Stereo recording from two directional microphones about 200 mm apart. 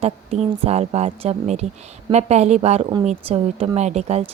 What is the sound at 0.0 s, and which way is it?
A woman's voice, 30° right (ahead or behind).